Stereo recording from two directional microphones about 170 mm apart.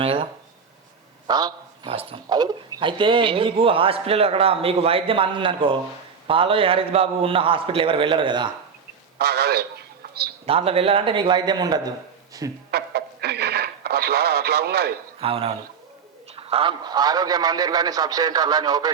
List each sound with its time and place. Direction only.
0.0 s speech: 35° right (ahead or behind)
1.3 s speech: 25° right (ahead or behind)
9.1 s a man's voice: 70° right (ahead or behind)
10.4 s a man's voice: 35° right (ahead or behind)
12.7 s radio: 75° right (ahead or behind)
15.2 s a man's voice: 35° right (ahead or behind)